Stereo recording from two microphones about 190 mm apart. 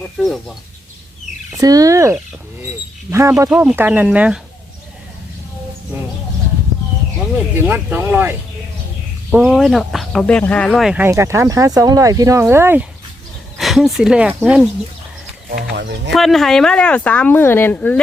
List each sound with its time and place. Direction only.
0.2 s speech: centre (ahead or behind)
1.5 s speech: 20° right (ahead or behind)
7.3 s speech: 10° right (ahead or behind)
13.6 s speech: centre (ahead or behind)
15.4 s speech: 55° right (ahead or behind)
16.1 s speech: centre (ahead or behind)